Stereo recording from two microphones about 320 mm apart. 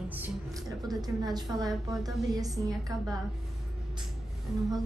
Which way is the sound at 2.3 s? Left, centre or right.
Centre.